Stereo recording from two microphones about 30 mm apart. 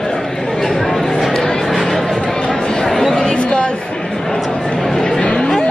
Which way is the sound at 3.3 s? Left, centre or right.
Left.